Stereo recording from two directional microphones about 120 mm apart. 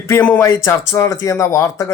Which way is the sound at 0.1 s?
20° left (ahead or behind).